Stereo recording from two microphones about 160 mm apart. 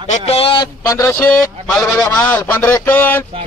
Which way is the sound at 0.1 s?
40° left (ahead or behind).